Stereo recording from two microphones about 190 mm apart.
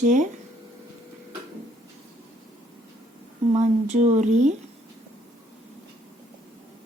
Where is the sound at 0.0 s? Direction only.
40° right (ahead or behind).